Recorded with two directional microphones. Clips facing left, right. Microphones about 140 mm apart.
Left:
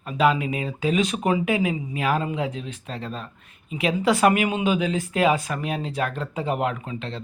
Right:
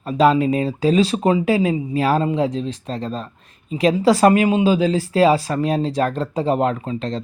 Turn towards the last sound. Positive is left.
turn(degrees=-40)  # may be behind; listen again after turning